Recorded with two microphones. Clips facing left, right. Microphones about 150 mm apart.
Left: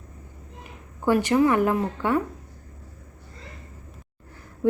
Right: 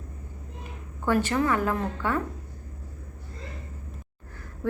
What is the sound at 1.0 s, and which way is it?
A woman's voice, 15° left (ahead or behind).